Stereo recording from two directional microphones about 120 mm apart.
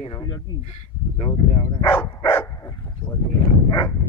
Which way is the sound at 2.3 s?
20° left (ahead or behind).